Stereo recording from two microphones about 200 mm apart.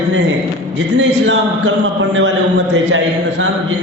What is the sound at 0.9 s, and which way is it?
A man's voice, 65° right (ahead or behind).